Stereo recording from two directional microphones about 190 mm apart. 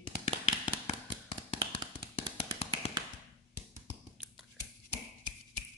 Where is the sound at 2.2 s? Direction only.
25° right (ahead or behind).